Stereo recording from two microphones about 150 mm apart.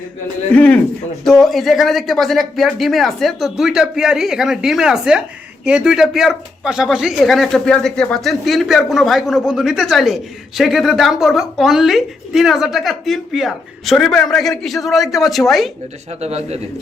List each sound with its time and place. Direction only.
0.5 s a man's voice: 10° left (ahead or behind)
16.2 s speech: 45° right (ahead or behind)